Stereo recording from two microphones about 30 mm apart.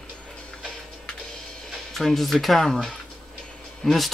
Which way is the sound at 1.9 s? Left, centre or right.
Centre.